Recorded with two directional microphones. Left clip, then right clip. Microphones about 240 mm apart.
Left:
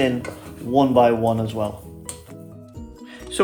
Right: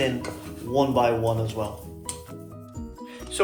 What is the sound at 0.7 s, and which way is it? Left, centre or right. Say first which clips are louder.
Speech: left 6 dB; left.